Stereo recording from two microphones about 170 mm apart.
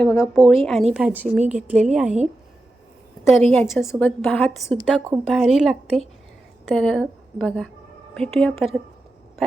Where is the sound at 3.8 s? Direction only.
10° left (ahead or behind).